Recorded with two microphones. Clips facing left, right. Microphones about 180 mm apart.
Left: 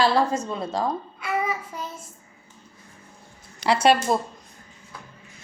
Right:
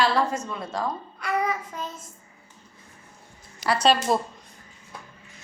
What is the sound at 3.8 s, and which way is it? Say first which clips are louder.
Speech: left 1 dB; 5° left (ahead or behind).